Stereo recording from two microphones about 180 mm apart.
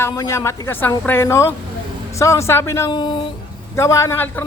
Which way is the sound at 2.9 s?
25° left (ahead or behind).